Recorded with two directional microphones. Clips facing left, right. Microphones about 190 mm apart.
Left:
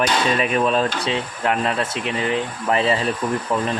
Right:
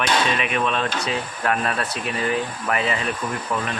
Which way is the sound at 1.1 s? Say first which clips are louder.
Left 2 dB; 20° left (ahead or behind).